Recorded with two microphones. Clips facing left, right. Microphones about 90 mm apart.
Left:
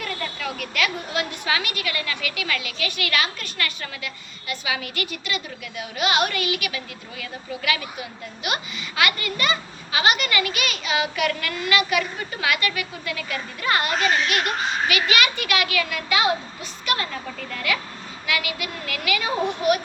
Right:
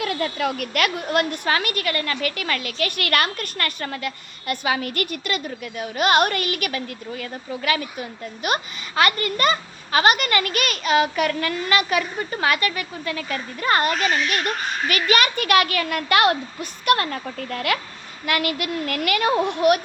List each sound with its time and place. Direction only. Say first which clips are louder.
0.0 s a woman's voice: right 6 dB; 70° right (ahead or behind); by 11.3 s 45° right (ahead or behind)
11.3 s a woman's voice: right 2 dB; 30° right (ahead or behind); by 19.8 s 55° right (ahead or behind)